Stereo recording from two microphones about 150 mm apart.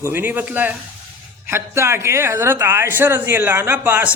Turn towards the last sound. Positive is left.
turn(degrees=-10)  # may be behind; listen again after turning